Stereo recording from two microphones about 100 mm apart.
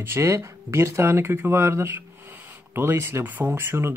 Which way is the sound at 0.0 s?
25° right (ahead or behind).